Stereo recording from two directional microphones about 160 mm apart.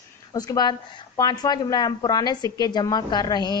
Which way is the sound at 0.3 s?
25° left (ahead or behind).